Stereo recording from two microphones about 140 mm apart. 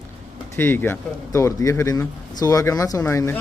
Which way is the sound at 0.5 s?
15° left (ahead or behind).